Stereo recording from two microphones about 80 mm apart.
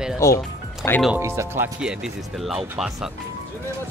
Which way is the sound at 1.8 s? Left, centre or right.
Centre.